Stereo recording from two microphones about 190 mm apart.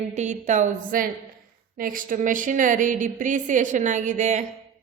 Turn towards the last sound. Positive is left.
turn(degrees=-40)  # may be behind; listen again after turning